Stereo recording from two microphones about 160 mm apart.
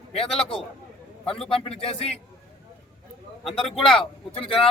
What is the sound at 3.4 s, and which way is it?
Speech, centre (ahead or behind).